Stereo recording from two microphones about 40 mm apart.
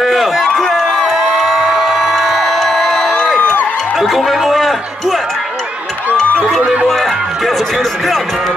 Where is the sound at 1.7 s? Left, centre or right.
Centre.